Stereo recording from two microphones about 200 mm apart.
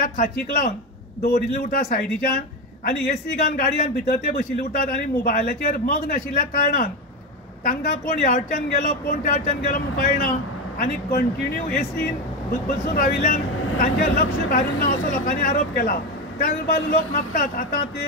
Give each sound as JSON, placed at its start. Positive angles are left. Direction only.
{"t": 0.0, "sound": "speech", "side_deg": 45}
{"t": 3.4, "sound": "speech", "side_deg": 45}
{"t": 12.9, "sound": "speech", "side_deg": 45}